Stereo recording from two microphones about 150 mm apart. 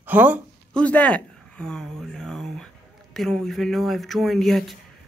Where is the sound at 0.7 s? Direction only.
10° left (ahead or behind).